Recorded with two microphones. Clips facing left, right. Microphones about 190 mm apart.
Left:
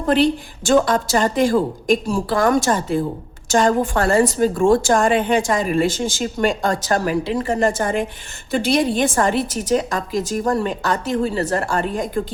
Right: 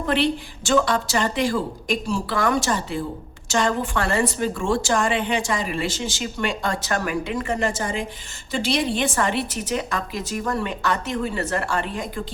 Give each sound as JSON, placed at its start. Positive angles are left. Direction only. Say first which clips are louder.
{"t": 0.0, "sound": "a woman's voice", "louder": "left 5 dB", "side_deg": 40}
{"t": 7.7, "sound": "a woman's voice", "louder": "left 6 dB", "side_deg": 55}